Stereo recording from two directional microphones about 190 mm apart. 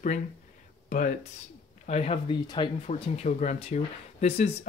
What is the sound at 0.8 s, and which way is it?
Speech, 45° left (ahead or behind).